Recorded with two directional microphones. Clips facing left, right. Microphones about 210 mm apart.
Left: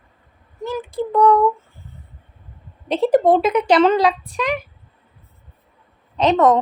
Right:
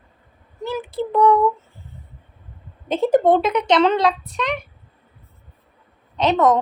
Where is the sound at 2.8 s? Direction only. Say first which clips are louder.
Left 1 dB; centre (ahead or behind).